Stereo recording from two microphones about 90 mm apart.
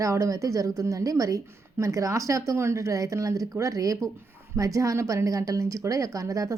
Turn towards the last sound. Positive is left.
turn(degrees=-40)  # may be behind; listen again after turning